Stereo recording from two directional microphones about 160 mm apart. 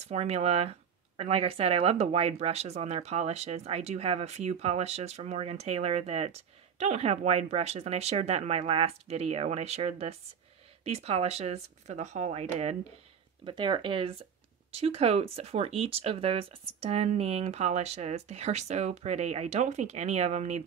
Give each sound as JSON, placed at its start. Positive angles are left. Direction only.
{"t": 0.1, "sound": "speech", "side_deg": -40}
{"t": 13.5, "sound": "speech", "side_deg": -30}